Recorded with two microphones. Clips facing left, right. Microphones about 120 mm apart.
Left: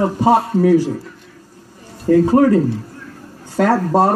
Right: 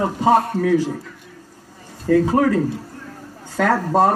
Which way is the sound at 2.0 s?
15° left (ahead or behind).